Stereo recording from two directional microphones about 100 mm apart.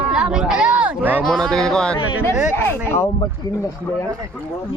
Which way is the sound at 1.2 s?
5° left (ahead or behind).